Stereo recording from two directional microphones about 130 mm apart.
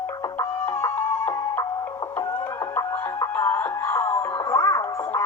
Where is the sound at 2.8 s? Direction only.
20° left (ahead or behind).